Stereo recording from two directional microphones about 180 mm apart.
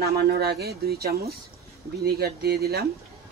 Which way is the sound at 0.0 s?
65° right (ahead or behind).